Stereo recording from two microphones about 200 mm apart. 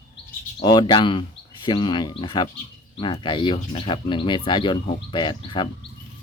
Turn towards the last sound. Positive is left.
turn(degrees=25)  # may be behind; listen again after turning